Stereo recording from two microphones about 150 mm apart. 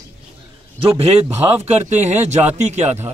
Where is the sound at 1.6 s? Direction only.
50° right (ahead or behind).